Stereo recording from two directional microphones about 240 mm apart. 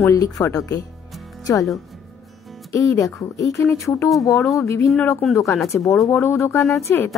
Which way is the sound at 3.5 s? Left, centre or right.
Centre.